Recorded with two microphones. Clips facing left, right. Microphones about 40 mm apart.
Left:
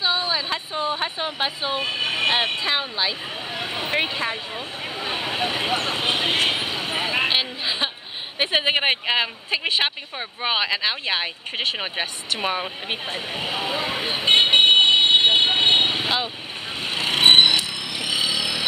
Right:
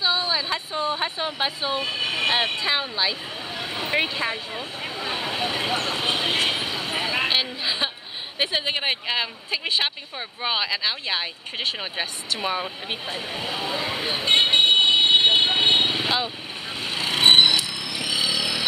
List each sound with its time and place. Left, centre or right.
0.0 s speech: centre
3.5 s vehicle: centre
8.5 s speech: left
12.8 s vehicle: left
17.8 s a sound: centre